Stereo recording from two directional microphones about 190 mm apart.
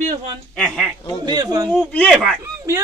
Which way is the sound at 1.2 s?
20° right (ahead or behind).